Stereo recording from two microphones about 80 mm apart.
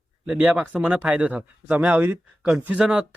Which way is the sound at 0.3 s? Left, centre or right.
Centre.